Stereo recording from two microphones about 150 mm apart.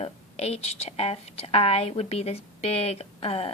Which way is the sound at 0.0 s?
45° left (ahead or behind).